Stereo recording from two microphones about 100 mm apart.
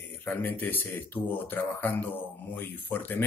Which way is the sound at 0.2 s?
20° left (ahead or behind).